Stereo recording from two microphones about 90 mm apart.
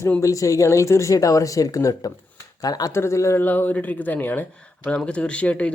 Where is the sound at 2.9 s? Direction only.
30° left (ahead or behind).